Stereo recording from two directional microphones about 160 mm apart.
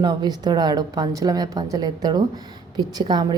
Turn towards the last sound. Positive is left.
turn(degrees=-25)  # may be behind; listen again after turning